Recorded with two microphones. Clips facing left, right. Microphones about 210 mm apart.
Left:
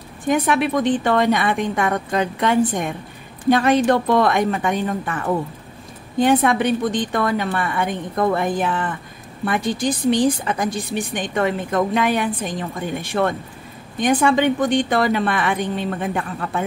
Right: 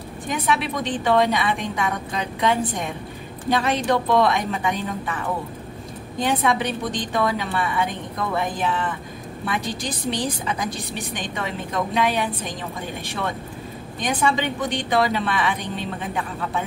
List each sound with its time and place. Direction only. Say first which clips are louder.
0.3 s a woman's voice: left 6 dB; 55° left (ahead or behind)
13.9 s a woman's voice: left 6 dB; 55° left (ahead or behind)